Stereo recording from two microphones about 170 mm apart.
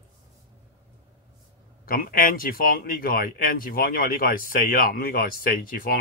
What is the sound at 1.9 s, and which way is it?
Speech, 55° left (ahead or behind).